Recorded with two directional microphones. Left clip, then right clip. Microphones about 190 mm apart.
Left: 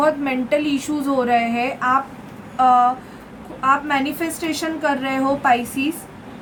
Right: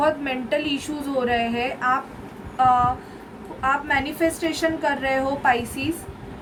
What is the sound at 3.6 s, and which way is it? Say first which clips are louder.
A woman's voice: left 4 dB; 20° left (ahead or behind).